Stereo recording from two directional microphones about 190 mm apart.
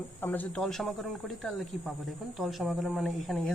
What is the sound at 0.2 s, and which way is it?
Speech, 10° left (ahead or behind).